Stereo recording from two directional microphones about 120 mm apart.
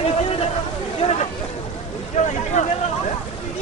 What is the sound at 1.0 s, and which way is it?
Speech, 55° left (ahead or behind).